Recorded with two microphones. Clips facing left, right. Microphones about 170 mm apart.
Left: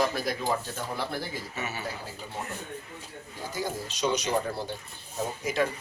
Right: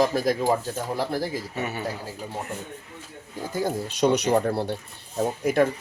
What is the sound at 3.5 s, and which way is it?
Speech, 55° right (ahead or behind).